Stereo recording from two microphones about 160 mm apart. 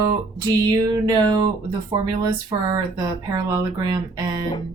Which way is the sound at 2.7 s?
25° right (ahead or behind).